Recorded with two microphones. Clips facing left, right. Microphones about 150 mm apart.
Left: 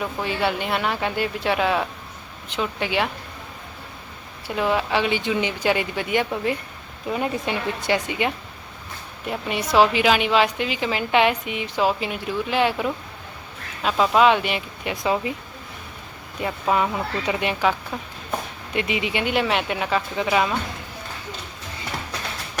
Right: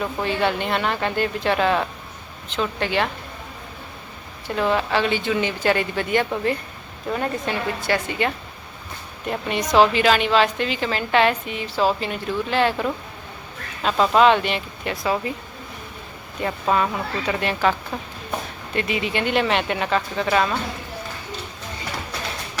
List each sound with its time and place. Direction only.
0.0 s a woman's voice: 5° left (ahead or behind)
4.4 s a woman's voice: 10° left (ahead or behind)
9.2 s a woman's voice: 5° left (ahead or behind)
16.4 s a woman's voice: 5° left (ahead or behind)